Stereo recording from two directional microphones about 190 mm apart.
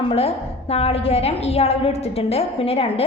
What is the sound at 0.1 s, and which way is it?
A woman's voice, 30° left (ahead or behind).